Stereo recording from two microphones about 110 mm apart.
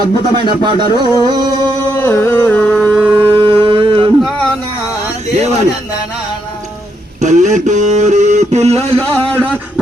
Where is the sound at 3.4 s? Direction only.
50° right (ahead or behind).